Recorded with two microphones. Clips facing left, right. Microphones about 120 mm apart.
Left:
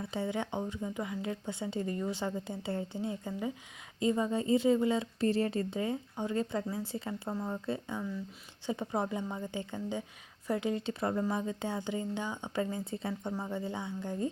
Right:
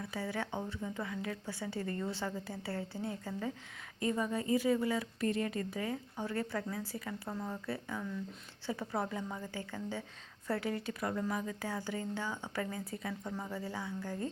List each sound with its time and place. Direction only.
0.0 s a woman's voice: 25° left (ahead or behind)